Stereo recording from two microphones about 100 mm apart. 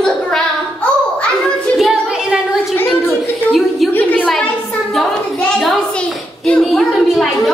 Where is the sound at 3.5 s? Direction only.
Centre (ahead or behind).